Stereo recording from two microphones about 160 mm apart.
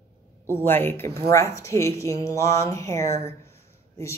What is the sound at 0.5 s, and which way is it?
Speech, 15° left (ahead or behind).